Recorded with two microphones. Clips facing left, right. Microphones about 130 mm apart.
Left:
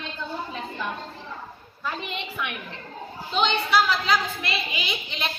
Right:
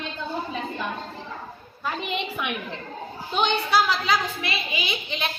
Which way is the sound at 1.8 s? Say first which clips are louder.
Right 3 dB; 15° right (ahead or behind).